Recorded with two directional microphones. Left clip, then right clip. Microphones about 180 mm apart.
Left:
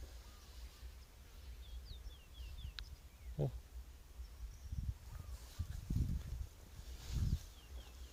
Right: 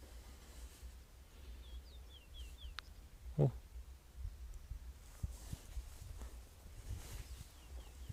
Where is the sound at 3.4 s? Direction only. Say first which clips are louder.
Right 6 dB; 55° right (ahead or behind).